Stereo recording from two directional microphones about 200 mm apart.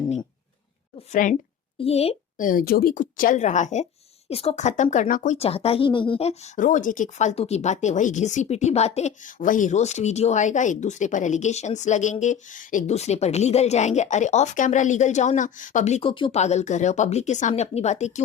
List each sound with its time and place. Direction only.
0.9 s a woman's voice: 40° left (ahead or behind)
2.5 s speech: 45° left (ahead or behind)